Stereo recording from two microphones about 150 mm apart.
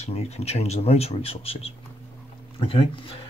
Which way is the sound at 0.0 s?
45° left (ahead or behind).